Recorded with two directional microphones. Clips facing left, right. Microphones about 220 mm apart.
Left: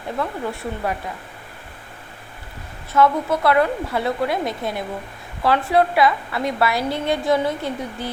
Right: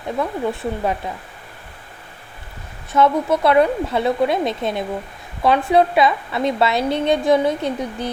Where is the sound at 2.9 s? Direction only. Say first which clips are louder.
Right 2 dB; 20° right (ahead or behind).